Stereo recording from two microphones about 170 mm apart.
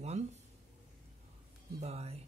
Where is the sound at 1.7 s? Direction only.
40° right (ahead or behind).